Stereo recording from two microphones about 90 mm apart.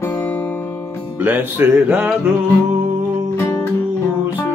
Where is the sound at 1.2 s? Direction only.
20° right (ahead or behind).